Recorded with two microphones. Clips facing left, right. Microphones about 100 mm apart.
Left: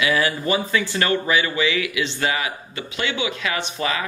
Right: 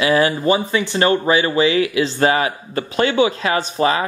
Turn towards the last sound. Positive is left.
turn(degrees=-35)  # may be behind; listen again after turning